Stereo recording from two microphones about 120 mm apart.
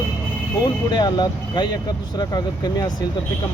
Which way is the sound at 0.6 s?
35° left (ahead or behind).